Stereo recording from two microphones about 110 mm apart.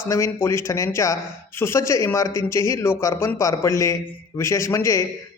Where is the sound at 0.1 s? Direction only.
25° left (ahead or behind).